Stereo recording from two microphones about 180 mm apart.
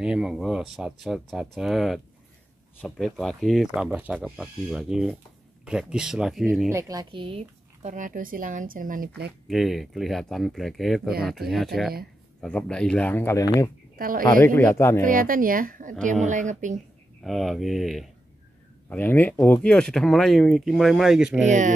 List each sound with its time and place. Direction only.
0.0 s speech: 5° right (ahead or behind)
6.7 s speech: 20° right (ahead or behind)
7.9 s speech: 45° right (ahead or behind)
9.5 s speech: centre (ahead or behind); by 13.7 s 15° left (ahead or behind)
13.9 s speech: 50° right (ahead or behind)
14.4 s speech: 10° left (ahead or behind)
15.0 s speech: 50° right (ahead or behind)
17.2 s speech: centre (ahead or behind)
21.5 s speech: 45° right (ahead or behind)